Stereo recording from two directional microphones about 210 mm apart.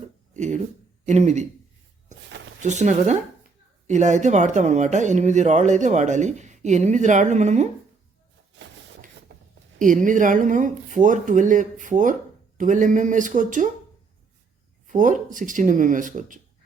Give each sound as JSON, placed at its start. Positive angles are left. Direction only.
{"t": 0.3, "sound": "speech", "side_deg": -35}
{"t": 2.6, "sound": "speech", "side_deg": -35}
{"t": 9.3, "sound": "writing", "side_deg": -60}
{"t": 9.7, "sound": "speech", "side_deg": -40}
{"t": 14.8, "sound": "speech", "side_deg": -35}